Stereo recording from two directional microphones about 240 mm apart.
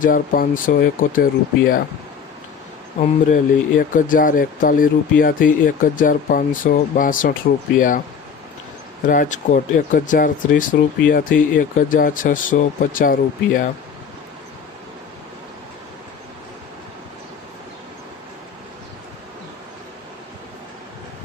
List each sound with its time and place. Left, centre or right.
0.0 s speech: left
3.0 s speech: left
9.0 s speech: left